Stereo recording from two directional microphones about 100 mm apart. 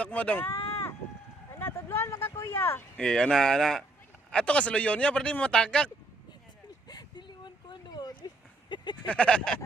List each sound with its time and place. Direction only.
0.0 s speech: 15° left (ahead or behind)
1.5 s speech: 25° left (ahead or behind)
3.0 s speech: 5° left (ahead or behind)
6.8 s a sound: 45° left (ahead or behind)
9.0 s speech: 10° left (ahead or behind)